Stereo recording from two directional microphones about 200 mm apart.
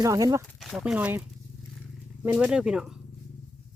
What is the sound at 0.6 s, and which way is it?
Speech, centre (ahead or behind).